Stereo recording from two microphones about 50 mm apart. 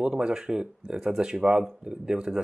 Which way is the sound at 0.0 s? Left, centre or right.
Centre.